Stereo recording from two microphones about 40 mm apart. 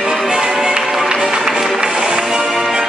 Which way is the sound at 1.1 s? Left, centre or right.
Centre.